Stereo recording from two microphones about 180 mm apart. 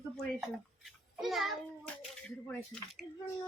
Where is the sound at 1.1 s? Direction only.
Centre (ahead or behind).